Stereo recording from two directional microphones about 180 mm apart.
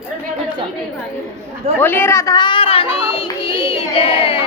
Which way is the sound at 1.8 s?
10° left (ahead or behind).